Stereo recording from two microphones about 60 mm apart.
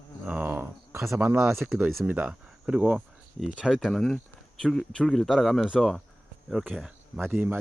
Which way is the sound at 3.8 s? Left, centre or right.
Centre.